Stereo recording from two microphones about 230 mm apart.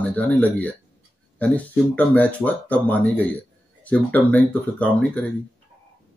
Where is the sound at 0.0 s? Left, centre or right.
Centre.